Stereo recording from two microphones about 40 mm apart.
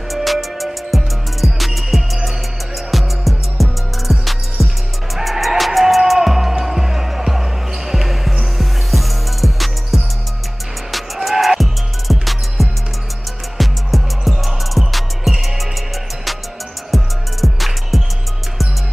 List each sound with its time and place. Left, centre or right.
0.1 s music: centre
16.9 s music: centre